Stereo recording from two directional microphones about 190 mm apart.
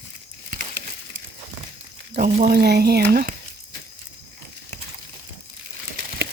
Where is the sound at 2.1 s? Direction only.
45° right (ahead or behind).